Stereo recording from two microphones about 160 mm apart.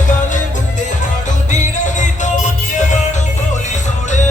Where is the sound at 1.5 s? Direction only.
50° left (ahead or behind).